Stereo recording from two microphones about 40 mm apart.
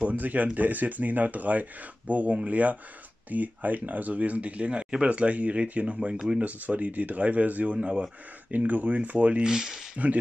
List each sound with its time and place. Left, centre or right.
0.0 s speech: right
5.9 s speech: centre
6.4 s speech: right
8.5 s speech: right
9.4 s speech: centre